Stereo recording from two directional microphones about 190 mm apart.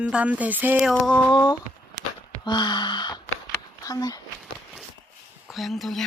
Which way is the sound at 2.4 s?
25° left (ahead or behind).